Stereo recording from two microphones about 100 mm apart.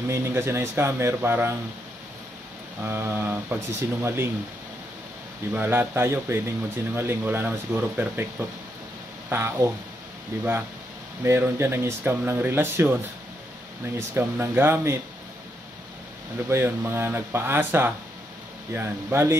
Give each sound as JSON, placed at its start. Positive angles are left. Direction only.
{"t": 0.1, "sound": "speech", "side_deg": -25}
{"t": 2.8, "sound": "speech", "side_deg": -20}
{"t": 5.5, "sound": "speech", "side_deg": -20}
{"t": 11.2, "sound": "speech", "side_deg": -25}
{"t": 16.4, "sound": "speech", "side_deg": -25}